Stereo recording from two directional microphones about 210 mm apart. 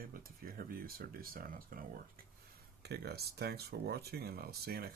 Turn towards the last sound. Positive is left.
turn(degrees=-45)  # may be behind; listen again after turning